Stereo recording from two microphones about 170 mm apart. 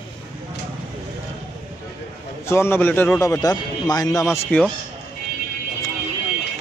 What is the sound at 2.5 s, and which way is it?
A man's voice, 15° left (ahead or behind).